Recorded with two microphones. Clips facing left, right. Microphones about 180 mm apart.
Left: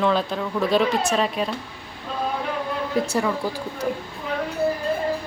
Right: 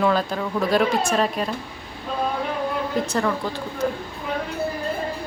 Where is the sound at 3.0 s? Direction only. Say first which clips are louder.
Even; 10° left (ahead or behind).